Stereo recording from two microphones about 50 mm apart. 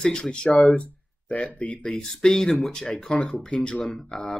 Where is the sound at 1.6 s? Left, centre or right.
Left.